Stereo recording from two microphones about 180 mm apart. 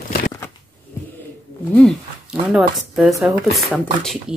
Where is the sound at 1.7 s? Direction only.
5° left (ahead or behind).